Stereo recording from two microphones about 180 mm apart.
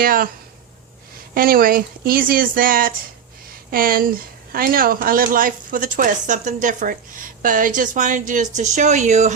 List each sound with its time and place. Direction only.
0.0 s speech: 50° right (ahead or behind)
1.3 s speech: 55° right (ahead or behind)